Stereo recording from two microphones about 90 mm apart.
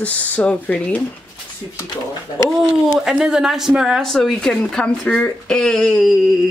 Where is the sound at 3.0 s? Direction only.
5° right (ahead or behind).